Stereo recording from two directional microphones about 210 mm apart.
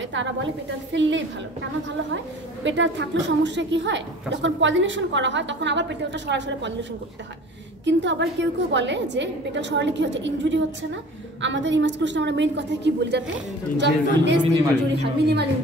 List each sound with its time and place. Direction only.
0.1 s a woman's voice: 60° right (ahead or behind)